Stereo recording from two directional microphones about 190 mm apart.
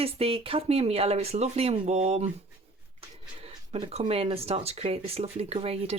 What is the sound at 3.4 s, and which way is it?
Speech, 30° right (ahead or behind).